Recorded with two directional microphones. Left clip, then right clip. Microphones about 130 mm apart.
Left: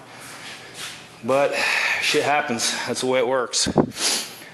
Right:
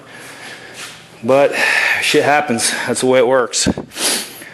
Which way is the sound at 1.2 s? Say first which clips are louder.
Right 7 dB; 25° right (ahead or behind).